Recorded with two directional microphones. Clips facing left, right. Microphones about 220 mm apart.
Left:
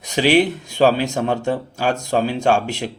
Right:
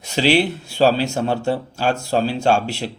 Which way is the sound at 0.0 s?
15° left (ahead or behind).